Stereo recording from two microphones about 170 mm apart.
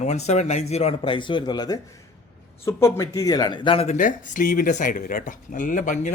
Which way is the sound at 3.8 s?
50° left (ahead or behind).